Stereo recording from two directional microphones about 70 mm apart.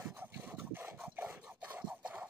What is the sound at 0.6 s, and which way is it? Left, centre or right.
Scratch, right.